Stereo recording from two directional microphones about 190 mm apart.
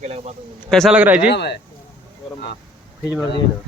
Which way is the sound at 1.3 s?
65° left (ahead or behind).